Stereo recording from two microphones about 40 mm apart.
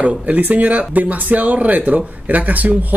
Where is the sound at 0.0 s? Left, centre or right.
Right.